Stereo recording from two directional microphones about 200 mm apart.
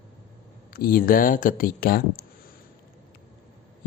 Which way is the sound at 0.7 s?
50° left (ahead or behind).